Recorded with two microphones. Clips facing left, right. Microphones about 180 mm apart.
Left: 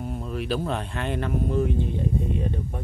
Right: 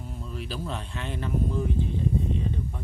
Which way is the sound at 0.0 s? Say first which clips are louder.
Left 7 dB; 65° left (ahead or behind).